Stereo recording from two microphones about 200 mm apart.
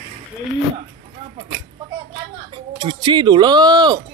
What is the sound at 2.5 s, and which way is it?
Speech, 20° right (ahead or behind).